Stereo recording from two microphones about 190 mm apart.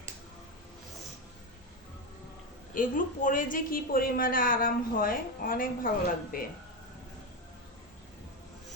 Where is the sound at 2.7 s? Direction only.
45° left (ahead or behind).